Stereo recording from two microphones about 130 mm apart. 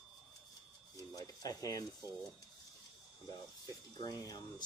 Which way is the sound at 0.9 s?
30° left (ahead or behind).